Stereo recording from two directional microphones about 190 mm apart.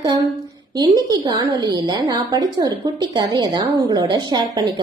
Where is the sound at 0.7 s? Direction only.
20° right (ahead or behind).